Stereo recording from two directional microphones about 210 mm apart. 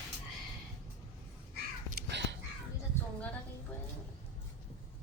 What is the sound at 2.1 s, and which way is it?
Whispering, 55° right (ahead or behind).